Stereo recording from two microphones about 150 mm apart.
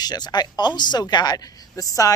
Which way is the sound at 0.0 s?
25° left (ahead or behind).